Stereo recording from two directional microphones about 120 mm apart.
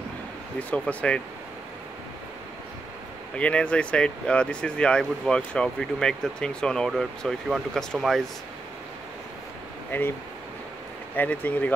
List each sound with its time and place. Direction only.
0.6 s speech: 10° left (ahead or behind)
3.3 s speech: 10° left (ahead or behind)
9.8 s speech: 15° left (ahead or behind)
11.1 s speech: 15° left (ahead or behind)